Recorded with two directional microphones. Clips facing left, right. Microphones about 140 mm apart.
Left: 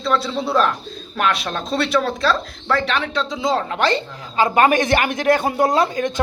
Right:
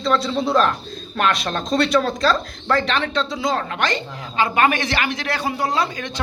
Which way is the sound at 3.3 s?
25° left (ahead or behind).